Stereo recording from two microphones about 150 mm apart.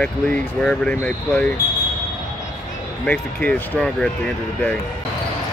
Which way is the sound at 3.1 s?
10° left (ahead or behind).